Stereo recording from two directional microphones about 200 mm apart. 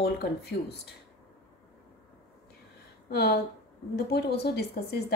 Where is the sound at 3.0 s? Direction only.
55° left (ahead or behind).